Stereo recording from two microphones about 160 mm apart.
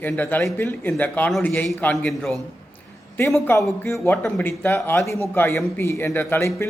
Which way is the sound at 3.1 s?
15° left (ahead or behind).